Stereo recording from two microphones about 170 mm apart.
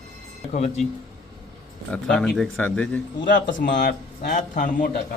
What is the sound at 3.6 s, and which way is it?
Speech, 90° left.